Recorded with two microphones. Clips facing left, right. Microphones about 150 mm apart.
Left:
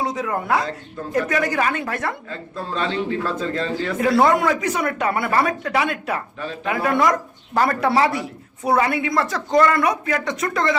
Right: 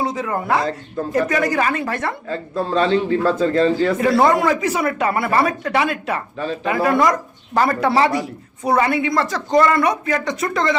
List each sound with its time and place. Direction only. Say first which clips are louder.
0.0 s speech: right 2 dB; centre (ahead or behind)
2.3 s speech: right 8 dB; 35° right (ahead or behind)
3.9 s speech: right 1 dB; centre (ahead or behind)